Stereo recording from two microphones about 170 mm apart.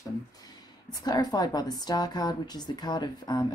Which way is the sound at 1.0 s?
25° left (ahead or behind).